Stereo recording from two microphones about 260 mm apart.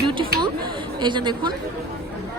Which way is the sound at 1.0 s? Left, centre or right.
Centre.